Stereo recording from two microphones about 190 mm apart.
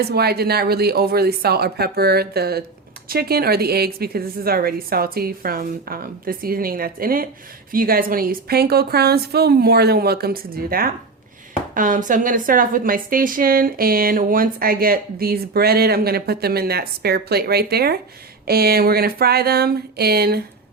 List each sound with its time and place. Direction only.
0.0 s a woman's voice: 55° right (ahead or behind)